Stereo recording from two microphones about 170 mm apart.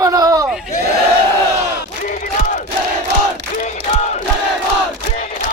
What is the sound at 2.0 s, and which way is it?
Battle cry, 50° left (ahead or behind).